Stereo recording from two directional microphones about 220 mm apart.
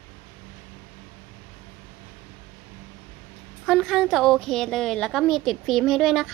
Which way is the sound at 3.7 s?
Centre (ahead or behind).